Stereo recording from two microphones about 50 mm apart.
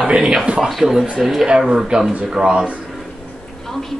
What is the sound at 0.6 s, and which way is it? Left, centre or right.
Speech, centre.